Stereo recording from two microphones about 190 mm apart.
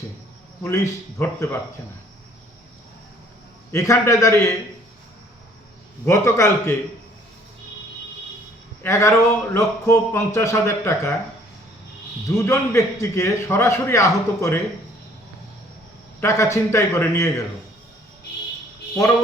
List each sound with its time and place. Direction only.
0.6 s speech: 15° left (ahead or behind)
3.7 s speech: 15° left (ahead or behind)
6.1 s speech: 15° left (ahead or behind)
8.8 s speech: 15° left (ahead or behind)
12.5 s speech: 15° left (ahead or behind)
16.2 s speech: 15° left (ahead or behind)